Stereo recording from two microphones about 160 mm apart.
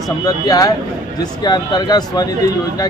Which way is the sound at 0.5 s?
20° left (ahead or behind).